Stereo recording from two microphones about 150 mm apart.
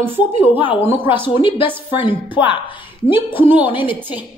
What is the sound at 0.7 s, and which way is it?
Speech, 15° right (ahead or behind).